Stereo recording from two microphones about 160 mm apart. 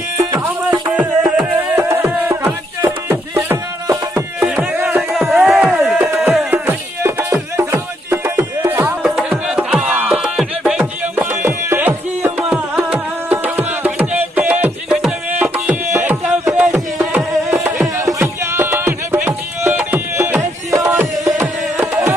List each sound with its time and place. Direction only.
0.9 s music: 10° right (ahead or behind)
5.1 s a sound: 5° right (ahead or behind)
6.3 s music: 10° right (ahead or behind)
9.0 s music: 5° right (ahead or behind)